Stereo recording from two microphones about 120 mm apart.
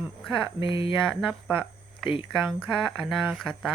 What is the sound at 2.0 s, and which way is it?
Speech, centre (ahead or behind).